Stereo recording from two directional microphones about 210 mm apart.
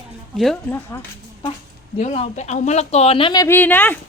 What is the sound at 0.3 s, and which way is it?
Speech, centre (ahead or behind).